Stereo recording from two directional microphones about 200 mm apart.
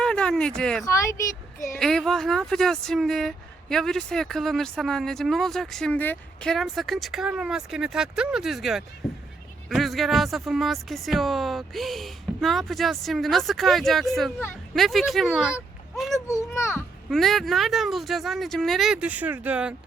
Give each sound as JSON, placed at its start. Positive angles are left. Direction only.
{"t": 0.0, "sound": "a sound", "side_deg": 5}
{"t": 0.9, "sound": "speech", "side_deg": 15}
{"t": 1.8, "sound": "speech", "side_deg": 0}
{"t": 9.0, "sound": "a sound", "side_deg": 0}
{"t": 9.6, "sound": "speech", "side_deg": 0}
{"t": 16.2, "sound": "a child's voice", "side_deg": 15}
{"t": 17.1, "sound": "speech", "side_deg": 0}